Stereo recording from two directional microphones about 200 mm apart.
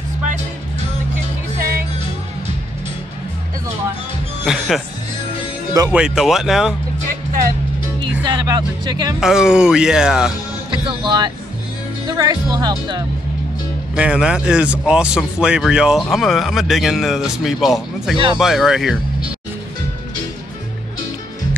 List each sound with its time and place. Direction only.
1.6 s music: 50° right (ahead or behind)
4.5 s speech: centre (ahead or behind)
5.7 s speech: 15° right (ahead or behind)
5.9 s speech: centre (ahead or behind)
8.0 s speech: 20° right (ahead or behind)
9.2 s speech: 5° right (ahead or behind)
10.7 s speech: 20° right (ahead or behind)
13.9 s speech: 5° right (ahead or behind)
18.1 s speech: 25° right (ahead or behind)
18.4 s speech: centre (ahead or behind)